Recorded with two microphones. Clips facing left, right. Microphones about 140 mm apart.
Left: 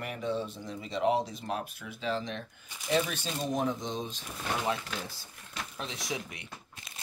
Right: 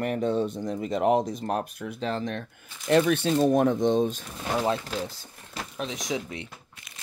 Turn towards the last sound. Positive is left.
turn(degrees=-25)  # may be behind; listen again after turning